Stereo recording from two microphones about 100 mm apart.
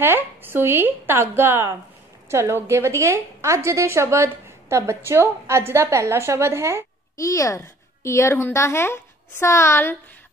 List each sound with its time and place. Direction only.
0.0 s a woman's voice: 20° right (ahead or behind)
7.2 s a woman's voice: 35° left (ahead or behind)